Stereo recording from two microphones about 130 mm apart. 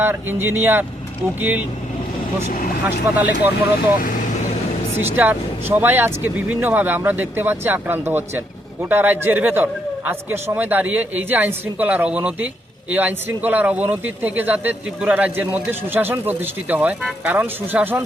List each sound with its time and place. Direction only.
0.0 s speech: 15° right (ahead or behind)
2.8 s speech: 15° right (ahead or behind)
5.1 s speech: 15° right (ahead or behind)